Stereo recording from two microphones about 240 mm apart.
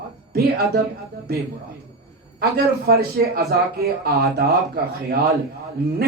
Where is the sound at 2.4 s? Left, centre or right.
Right.